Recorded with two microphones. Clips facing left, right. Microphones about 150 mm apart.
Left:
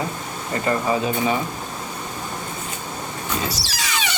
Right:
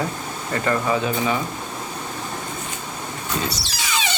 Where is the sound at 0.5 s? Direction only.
20° left (ahead or behind).